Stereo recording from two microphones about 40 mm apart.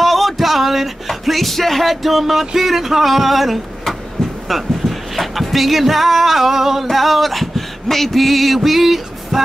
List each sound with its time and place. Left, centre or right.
0.0 s speech: centre
3.8 s a sound: centre
4.6 s speech: centre